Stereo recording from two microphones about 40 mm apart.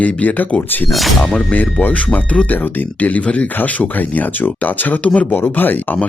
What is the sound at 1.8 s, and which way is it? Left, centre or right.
Speech, left.